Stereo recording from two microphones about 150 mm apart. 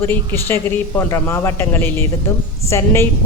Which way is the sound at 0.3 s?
15° left (ahead or behind).